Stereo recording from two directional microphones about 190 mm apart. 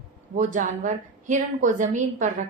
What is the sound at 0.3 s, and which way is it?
A woman's voice, 40° right (ahead or behind).